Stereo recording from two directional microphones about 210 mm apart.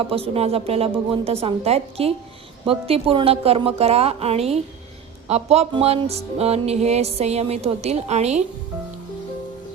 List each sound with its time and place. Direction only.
0.1 s a woman's voice: 30° right (ahead or behind)